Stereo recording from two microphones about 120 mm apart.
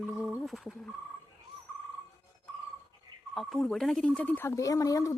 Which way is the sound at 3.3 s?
Centre (ahead or behind).